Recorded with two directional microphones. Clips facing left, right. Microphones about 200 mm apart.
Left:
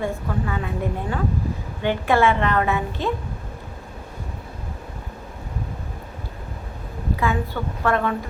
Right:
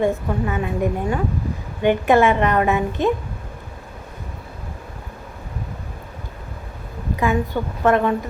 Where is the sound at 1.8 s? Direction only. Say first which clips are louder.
Right 4 dB; 15° right (ahead or behind).